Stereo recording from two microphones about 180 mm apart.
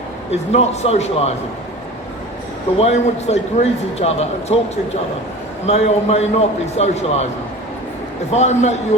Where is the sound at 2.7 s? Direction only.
35° left (ahead or behind).